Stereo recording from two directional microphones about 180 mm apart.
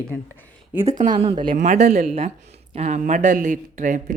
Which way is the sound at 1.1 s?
30° right (ahead or behind).